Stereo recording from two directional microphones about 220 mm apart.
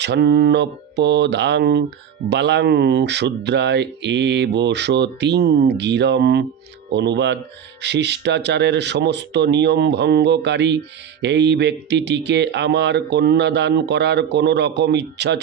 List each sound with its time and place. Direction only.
0.0 s speech: 50° right (ahead or behind)